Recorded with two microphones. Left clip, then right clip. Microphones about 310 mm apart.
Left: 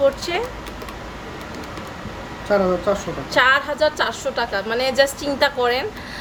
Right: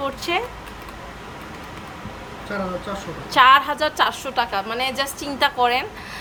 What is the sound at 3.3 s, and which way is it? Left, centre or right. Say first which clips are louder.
A woman's voice: right 3 dB; centre.